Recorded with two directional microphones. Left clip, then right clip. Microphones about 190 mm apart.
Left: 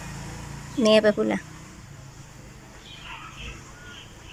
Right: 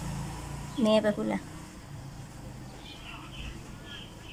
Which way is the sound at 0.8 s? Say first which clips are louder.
Left 7 dB; 5° left (ahead or behind).